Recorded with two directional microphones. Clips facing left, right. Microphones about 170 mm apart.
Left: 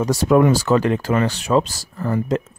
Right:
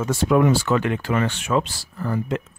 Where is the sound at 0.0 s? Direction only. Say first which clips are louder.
Left 3 dB; 40° left (ahead or behind).